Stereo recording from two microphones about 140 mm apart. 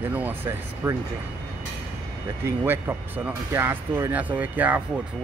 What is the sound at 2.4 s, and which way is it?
Speech, 15° right (ahead or behind).